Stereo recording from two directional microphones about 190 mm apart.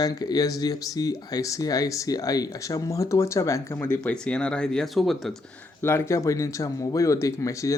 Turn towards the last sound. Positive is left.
turn(degrees=15)  # may be behind; listen again after turning